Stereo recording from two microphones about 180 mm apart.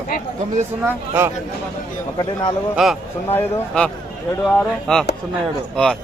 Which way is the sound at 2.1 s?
25° left (ahead or behind).